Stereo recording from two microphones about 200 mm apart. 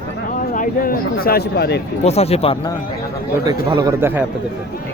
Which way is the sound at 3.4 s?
20° right (ahead or behind).